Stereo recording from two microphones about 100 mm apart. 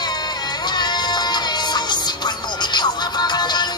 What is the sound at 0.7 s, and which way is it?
Music, 45° left (ahead or behind).